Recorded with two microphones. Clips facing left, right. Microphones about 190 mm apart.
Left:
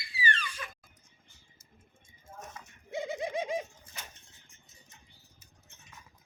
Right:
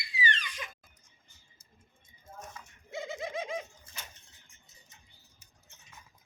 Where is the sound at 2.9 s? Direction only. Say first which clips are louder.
Left 3 dB; 15° left (ahead or behind).